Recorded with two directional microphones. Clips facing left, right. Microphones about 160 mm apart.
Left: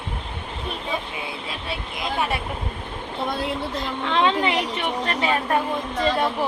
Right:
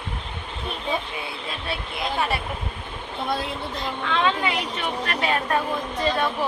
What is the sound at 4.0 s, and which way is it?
A woman's voice, 25° left (ahead or behind).